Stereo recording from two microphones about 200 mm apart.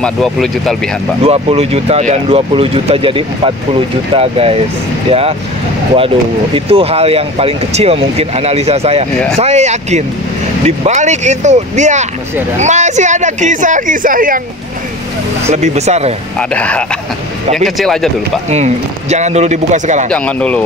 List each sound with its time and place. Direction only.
0.0 s speech: centre (ahead or behind)
1.2 s speech: 30° right (ahead or behind)
5.9 s speech: 30° right (ahead or behind); by 14.4 s 45° right (ahead or behind)
15.5 s speech: 35° right (ahead or behind)
16.3 s speech: 5° left (ahead or behind)
18.5 s speech: 35° right (ahead or behind)
20.1 s speech: 5° left (ahead or behind)